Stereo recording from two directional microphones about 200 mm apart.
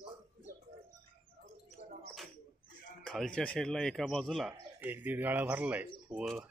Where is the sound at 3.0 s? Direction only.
5° left (ahead or behind).